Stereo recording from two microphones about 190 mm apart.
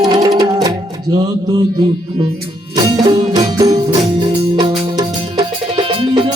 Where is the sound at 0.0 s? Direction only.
20° right (ahead or behind).